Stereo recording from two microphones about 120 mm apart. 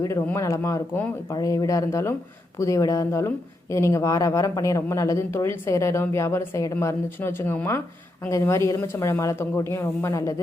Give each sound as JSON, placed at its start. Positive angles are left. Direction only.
{"t": 0.3, "sound": "speech", "side_deg": 25}